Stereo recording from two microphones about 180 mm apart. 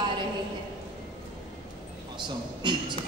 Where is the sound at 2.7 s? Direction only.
25° right (ahead or behind).